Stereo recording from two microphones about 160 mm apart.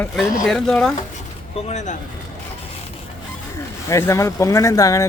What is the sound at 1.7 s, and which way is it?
Speech, 50° left (ahead or behind).